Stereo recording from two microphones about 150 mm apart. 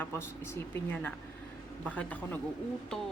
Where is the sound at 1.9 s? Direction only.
10° left (ahead or behind).